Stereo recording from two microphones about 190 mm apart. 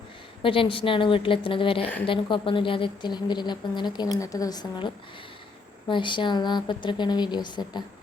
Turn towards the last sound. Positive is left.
turn(degrees=25)  # may be behind; listen again after turning